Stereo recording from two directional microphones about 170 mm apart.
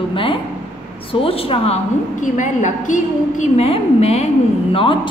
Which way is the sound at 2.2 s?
50° left (ahead or behind).